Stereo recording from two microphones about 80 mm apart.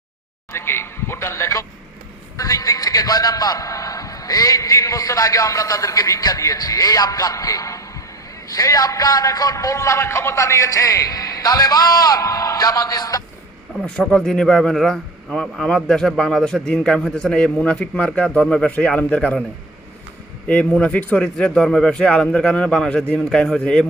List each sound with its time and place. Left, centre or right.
0.5 s a sound: left
2.4 s a man's voice: left
14.0 s a man's voice: centre
20.5 s a man's voice: centre
21.3 s a man's voice: centre